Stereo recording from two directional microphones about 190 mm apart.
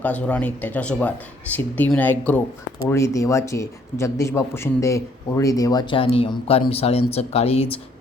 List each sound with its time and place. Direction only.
0.0 s a man's voice: 5° left (ahead or behind); by 7.8 s 30° left (ahead or behind)